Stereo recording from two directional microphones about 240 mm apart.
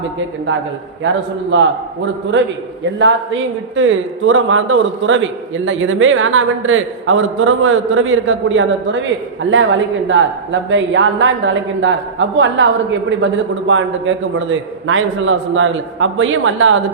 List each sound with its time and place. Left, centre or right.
1.0 s a woman's voice: right